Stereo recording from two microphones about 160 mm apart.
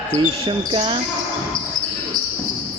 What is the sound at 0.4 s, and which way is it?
Speech, 30° right (ahead or behind).